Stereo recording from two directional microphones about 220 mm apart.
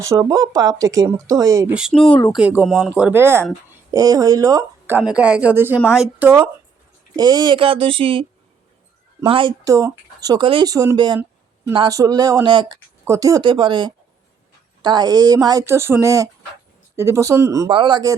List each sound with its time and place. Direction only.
0.0 s a woman's voice: 15° right (ahead or behind)
7.2 s a woman's voice: 20° right (ahead or behind)